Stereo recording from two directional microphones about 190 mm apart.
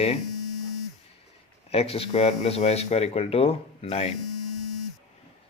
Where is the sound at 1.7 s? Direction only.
30° left (ahead or behind).